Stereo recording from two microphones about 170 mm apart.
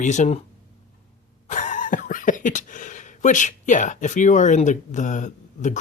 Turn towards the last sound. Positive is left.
turn(degrees=45)  # may be behind; listen again after turning